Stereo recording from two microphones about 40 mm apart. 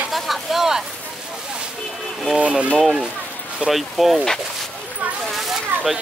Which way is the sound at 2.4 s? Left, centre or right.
Right.